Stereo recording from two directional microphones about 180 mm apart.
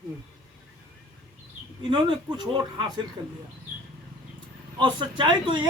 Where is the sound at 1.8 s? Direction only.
25° right (ahead or behind).